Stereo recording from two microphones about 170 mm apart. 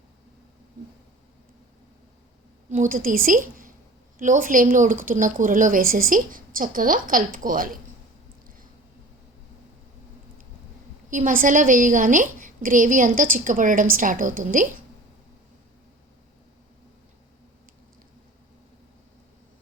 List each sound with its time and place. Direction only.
2.6 s a woman's voice: 50° right (ahead or behind)
11.1 s a woman's voice: 50° right (ahead or behind)